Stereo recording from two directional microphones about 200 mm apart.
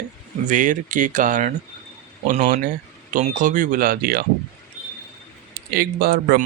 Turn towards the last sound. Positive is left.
turn(degrees=-50)  # may be behind; listen again after turning